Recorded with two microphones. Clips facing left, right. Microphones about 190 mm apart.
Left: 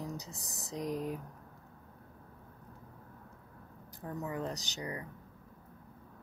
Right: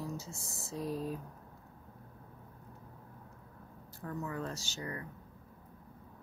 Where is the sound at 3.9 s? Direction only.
20° left (ahead or behind).